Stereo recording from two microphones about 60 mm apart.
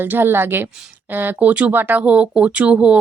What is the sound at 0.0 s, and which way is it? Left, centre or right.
A woman's voice, right.